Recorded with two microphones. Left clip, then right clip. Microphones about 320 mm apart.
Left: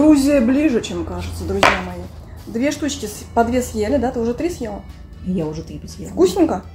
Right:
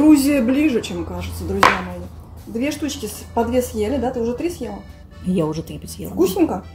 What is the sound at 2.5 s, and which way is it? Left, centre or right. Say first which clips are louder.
A woman's voice: left 3 dB; centre.